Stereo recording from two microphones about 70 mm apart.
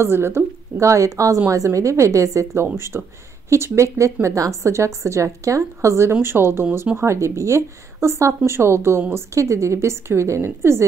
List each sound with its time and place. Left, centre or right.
0.0 s a woman's voice: right
2.9 s speech: right
3.4 s a woman's voice: right